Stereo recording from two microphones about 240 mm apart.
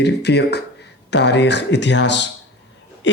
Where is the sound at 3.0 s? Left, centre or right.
Left.